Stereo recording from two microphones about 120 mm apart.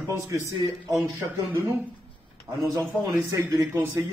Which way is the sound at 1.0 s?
25° right (ahead or behind).